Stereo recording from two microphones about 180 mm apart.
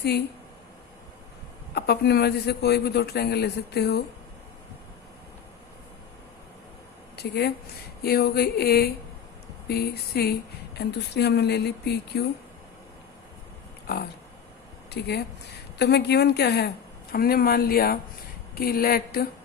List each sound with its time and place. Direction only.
1.7 s a man's voice: 65° left (ahead or behind)
7.2 s a man's voice: 65° left (ahead or behind)
14.8 s a man's voice: 65° left (ahead or behind)